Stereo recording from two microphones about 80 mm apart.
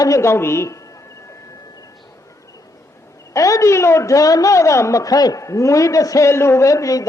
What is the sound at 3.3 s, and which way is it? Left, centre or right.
A woman's voice, left.